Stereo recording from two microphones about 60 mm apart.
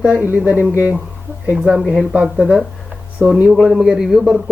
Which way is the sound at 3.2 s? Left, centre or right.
Right.